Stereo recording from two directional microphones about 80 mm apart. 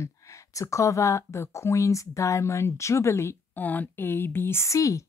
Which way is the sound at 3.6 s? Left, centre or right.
Left.